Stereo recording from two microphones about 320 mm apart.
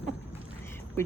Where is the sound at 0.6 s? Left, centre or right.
Centre.